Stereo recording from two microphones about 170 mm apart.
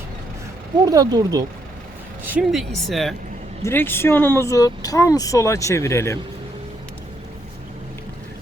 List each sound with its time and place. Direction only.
0.9 s speech: 20° right (ahead or behind)
2.2 s speech: 5° right (ahead or behind)
3.6 s speech: 15° left (ahead or behind)